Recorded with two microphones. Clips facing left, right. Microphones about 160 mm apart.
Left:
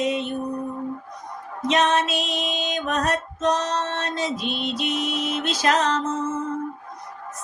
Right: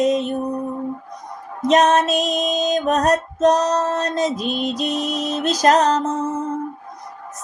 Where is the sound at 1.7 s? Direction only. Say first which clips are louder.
Right 6 dB; 40° right (ahead or behind).